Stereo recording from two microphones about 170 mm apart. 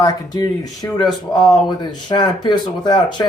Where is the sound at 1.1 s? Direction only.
Centre (ahead or behind).